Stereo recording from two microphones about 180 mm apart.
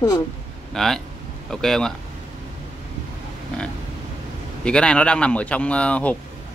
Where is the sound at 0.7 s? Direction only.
Centre (ahead or behind).